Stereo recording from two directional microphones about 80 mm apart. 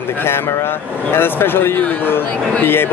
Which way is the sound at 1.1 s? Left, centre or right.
Left.